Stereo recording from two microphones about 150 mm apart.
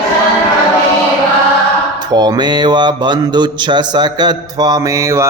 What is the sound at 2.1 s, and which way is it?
Mantra, 30° right (ahead or behind).